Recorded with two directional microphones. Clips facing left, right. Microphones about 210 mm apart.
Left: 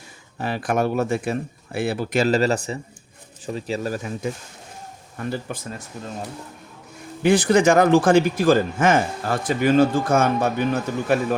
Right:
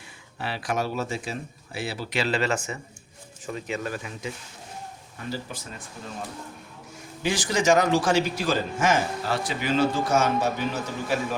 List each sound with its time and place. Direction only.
0.3 s speech: 45° left (ahead or behind)
5.1 s speech: 55° left (ahead or behind)
7.2 s speech: 60° left (ahead or behind)